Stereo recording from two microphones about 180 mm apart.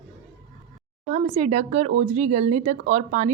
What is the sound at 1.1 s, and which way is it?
Speech, 35° right (ahead or behind).